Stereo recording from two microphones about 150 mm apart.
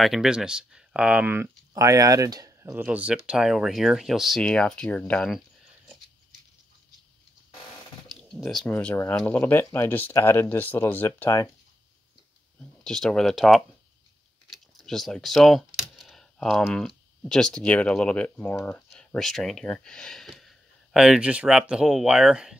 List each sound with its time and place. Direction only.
0.0 s speech: centre (ahead or behind)
1.7 s speech: 25° right (ahead or behind)
2.7 s speech: 10° right (ahead or behind)
8.2 s computer keyboard: centre (ahead or behind)
8.6 s speech: 10° left (ahead or behind)
12.8 s speech: 5° left (ahead or behind)
14.5 s coin: centre (ahead or behind)
16.6 s speech: 5° left (ahead or behind)
18.9 s speech: centre (ahead or behind)